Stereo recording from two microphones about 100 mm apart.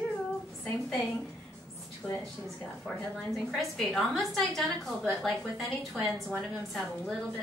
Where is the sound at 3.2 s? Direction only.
Centre (ahead or behind).